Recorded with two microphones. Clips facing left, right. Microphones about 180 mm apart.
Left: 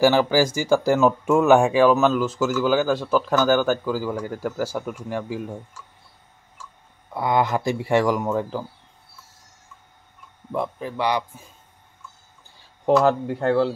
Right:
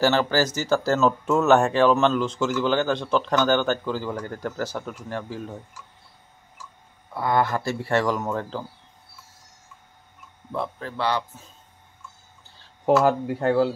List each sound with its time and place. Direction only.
0.0 s speech: 10° left (ahead or behind)
7.2 s speech: 15° left (ahead or behind)
10.5 s speech: 15° left (ahead or behind)
12.8 s speech: 5° right (ahead or behind)